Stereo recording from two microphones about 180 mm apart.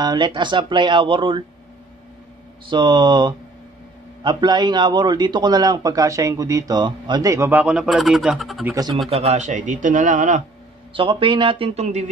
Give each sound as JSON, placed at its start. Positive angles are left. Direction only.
{"t": 0.0, "sound": "a man's voice", "side_deg": -25}
{"t": 2.6, "sound": "a man's voice", "side_deg": -25}
{"t": 8.6, "sound": "a man's voice", "side_deg": -20}
{"t": 9.1, "sound": "a man's voice", "side_deg": -35}
{"t": 10.9, "sound": "a man's voice", "side_deg": -30}